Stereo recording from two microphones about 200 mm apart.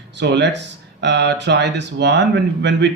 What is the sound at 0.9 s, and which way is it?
Speech, 60° right (ahead or behind).